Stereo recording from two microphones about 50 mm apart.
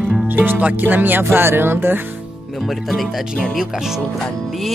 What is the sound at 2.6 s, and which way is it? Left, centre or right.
Speech, centre.